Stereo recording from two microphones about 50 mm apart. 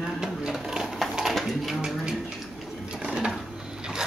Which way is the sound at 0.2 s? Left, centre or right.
Centre.